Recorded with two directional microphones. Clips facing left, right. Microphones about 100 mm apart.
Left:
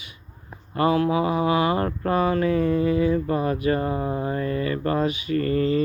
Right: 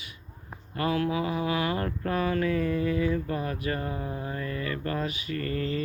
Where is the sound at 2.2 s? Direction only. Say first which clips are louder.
Left 5 dB; 20° left (ahead or behind).